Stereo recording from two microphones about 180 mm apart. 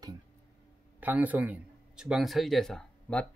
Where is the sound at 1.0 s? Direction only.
10° right (ahead or behind).